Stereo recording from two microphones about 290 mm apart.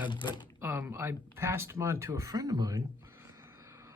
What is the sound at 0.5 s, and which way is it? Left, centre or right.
Speech, centre.